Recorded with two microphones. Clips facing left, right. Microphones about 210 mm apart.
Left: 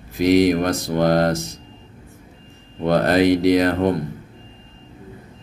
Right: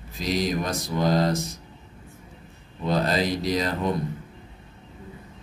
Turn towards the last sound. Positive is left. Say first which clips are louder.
# left 9 dB
turn(degrees=60)  # may be behind; listen again after turning